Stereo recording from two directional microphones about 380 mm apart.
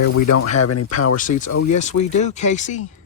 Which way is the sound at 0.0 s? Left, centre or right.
Left.